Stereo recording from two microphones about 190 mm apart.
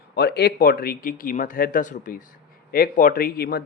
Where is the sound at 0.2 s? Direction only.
60° left (ahead or behind).